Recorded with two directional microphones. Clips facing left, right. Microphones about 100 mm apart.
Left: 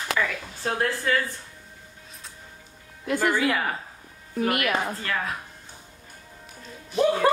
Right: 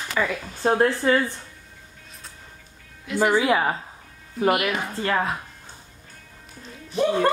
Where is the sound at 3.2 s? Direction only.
15° right (ahead or behind).